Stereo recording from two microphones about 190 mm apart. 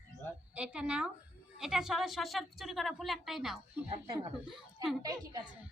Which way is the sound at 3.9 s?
30° right (ahead or behind).